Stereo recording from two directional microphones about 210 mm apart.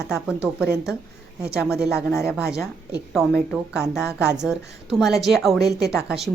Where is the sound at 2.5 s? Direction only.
5° right (ahead or behind).